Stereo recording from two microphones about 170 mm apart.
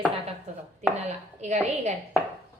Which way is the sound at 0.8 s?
40° right (ahead or behind).